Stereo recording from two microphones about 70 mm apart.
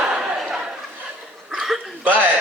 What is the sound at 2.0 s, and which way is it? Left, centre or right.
Speech, right.